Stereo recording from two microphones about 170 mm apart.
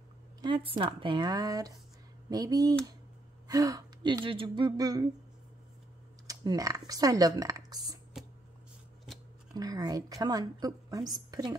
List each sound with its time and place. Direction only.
0.4 s a woman's voice: 30° right (ahead or behind)
6.2 s speech: 20° right (ahead or behind)
9.5 s a woman's voice: 25° right (ahead or behind)